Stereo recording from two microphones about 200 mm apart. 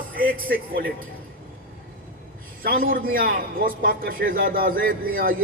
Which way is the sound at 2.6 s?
45° right (ahead or behind).